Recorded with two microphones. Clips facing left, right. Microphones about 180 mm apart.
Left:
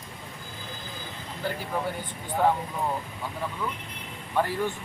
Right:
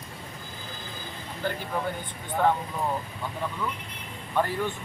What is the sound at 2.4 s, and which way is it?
Speech, 10° left (ahead or behind).